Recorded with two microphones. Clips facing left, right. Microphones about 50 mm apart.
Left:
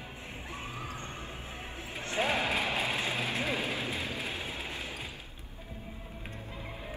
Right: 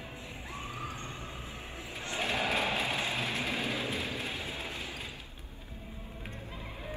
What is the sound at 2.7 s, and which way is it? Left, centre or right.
Vehicle, left.